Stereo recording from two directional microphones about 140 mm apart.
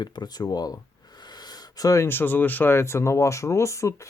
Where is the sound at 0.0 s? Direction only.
30° left (ahead or behind).